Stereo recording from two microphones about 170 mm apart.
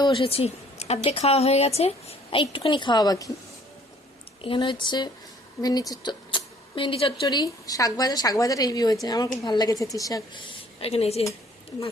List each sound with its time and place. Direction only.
0.0 s a woman's voice: 30° left (ahead or behind)
4.4 s speech: 30° left (ahead or behind)
10.8 s a woman's voice: 35° left (ahead or behind)